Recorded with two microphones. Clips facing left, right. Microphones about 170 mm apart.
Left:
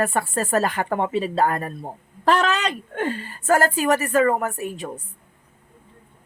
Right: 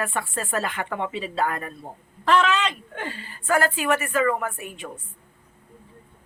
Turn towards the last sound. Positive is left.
turn(degrees=40)  # may be behind; listen again after turning